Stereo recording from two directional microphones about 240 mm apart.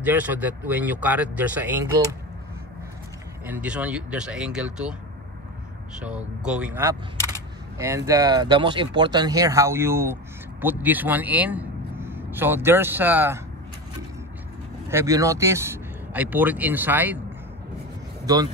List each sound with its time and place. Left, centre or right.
0.0 s speech: centre
3.4 s speech: centre
5.9 s a man's voice: centre
14.9 s speech: centre
18.2 s speech: centre